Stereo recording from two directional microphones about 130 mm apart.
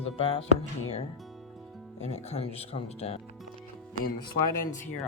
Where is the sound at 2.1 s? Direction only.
55° left (ahead or behind).